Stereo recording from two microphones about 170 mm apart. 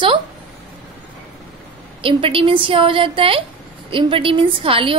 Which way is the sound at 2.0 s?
30° right (ahead or behind).